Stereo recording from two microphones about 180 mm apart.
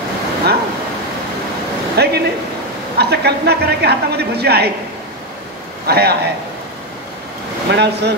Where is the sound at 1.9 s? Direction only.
65° right (ahead or behind).